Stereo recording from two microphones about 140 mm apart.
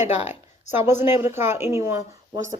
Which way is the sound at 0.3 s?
15° right (ahead or behind).